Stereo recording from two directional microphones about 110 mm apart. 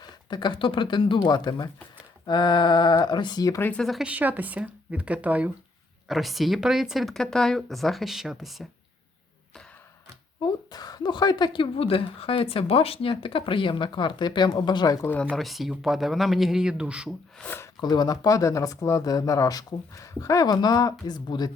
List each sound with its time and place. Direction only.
0.0 s speech: 40° left (ahead or behind)
3.6 s speech: 10° left (ahead or behind)
4.0 s speech: 15° right (ahead or behind)
6.1 s speech: centre (ahead or behind)
10.4 s speech: 35° left (ahead or behind)
15.0 s speech: 15° left (ahead or behind); by 17.2 s 10° right (ahead or behind)
17.4 s speech: 20° left (ahead or behind)
17.7 s speech: 40° left (ahead or behind)